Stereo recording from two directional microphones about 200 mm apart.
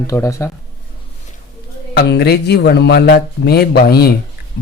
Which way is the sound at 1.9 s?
60° left (ahead or behind).